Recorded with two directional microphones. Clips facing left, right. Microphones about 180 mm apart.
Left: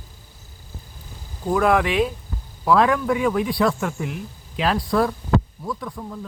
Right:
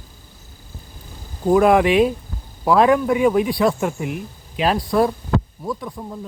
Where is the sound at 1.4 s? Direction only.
20° right (ahead or behind).